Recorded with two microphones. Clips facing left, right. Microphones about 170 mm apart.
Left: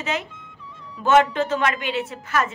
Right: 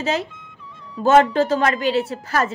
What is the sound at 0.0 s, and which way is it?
A woman's voice, 35° right (ahead or behind).